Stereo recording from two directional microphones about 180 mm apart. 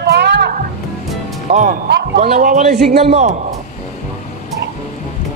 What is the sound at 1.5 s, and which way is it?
A man's voice, 45° right (ahead or behind).